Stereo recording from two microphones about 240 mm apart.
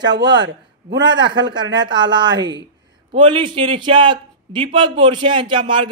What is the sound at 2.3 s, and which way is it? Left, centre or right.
Speech, right.